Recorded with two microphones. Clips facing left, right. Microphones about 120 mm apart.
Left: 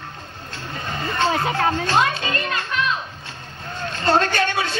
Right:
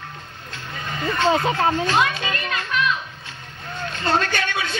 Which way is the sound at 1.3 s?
30° right (ahead or behind).